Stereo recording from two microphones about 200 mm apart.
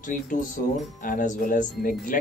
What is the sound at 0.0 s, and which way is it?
Speech, 40° left (ahead or behind).